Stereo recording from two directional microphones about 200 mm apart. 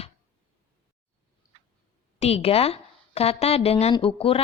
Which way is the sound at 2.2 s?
30° left (ahead or behind).